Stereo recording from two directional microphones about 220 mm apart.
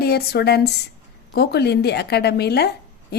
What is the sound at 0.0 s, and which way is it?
Speech, 45° left (ahead or behind).